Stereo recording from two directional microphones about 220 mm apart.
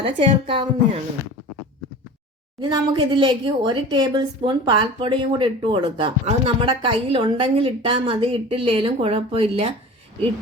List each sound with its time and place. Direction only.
0.0 s a woman's voice: 25° right (ahead or behind)
2.6 s a woman's voice: 20° right (ahead or behind)